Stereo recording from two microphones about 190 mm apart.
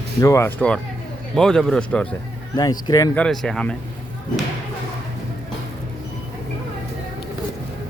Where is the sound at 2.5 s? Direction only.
20° left (ahead or behind).